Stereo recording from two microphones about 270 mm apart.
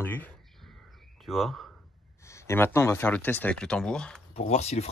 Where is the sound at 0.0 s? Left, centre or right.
Centre.